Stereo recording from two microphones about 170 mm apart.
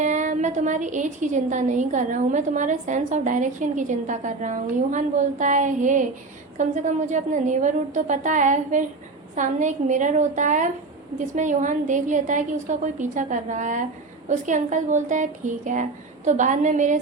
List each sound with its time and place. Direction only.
0.0 s a woman's voice: 45° right (ahead or behind)